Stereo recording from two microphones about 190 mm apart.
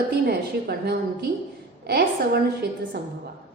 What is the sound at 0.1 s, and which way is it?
Speech, 55° right (ahead or behind).